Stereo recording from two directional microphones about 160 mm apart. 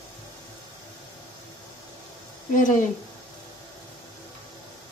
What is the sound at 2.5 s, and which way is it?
Speech, 55° left (ahead or behind).